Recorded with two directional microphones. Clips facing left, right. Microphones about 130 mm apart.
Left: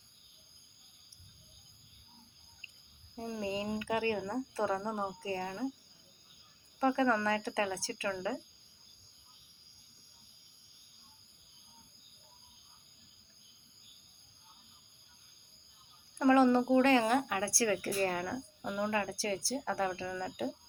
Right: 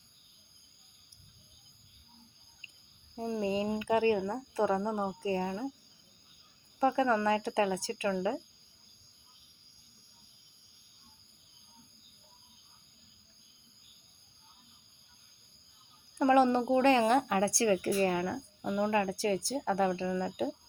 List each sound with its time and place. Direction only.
3.2 s speech: 20° right (ahead or behind)
5.2 s speech: 20° right (ahead or behind)
6.7 s speech: 20° right (ahead or behind)
16.1 s speech: 20° right (ahead or behind)